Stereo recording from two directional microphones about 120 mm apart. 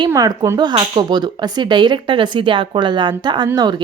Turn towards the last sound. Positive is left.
turn(degrees=-35)  # may be behind; listen again after turning